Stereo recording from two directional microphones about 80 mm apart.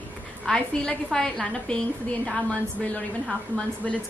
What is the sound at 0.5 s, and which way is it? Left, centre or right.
A woman's voice, centre.